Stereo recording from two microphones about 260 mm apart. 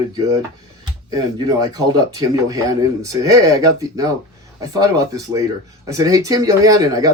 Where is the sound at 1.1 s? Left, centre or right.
Centre.